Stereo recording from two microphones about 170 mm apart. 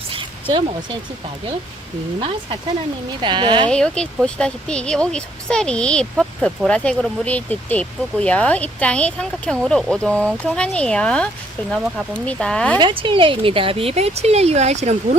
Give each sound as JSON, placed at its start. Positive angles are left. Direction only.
{"t": 0.1, "sound": "a sound", "side_deg": -30}
{"t": 3.2, "sound": "speech", "side_deg": -25}
{"t": 3.7, "sound": "speech", "side_deg": 5}
{"t": 12.7, "sound": "speech", "side_deg": -30}